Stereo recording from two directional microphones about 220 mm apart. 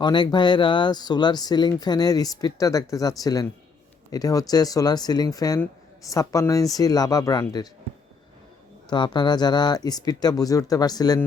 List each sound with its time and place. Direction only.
0.0 s speech: 20° left (ahead or behind)
8.9 s speech: 20° left (ahead or behind)